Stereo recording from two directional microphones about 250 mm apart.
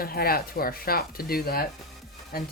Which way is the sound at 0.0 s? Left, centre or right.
Left.